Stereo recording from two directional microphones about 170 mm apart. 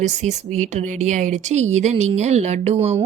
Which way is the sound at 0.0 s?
45° right (ahead or behind).